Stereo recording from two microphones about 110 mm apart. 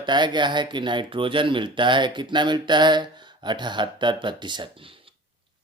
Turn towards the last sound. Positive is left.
turn(degrees=-45)  # may be behind; listen again after turning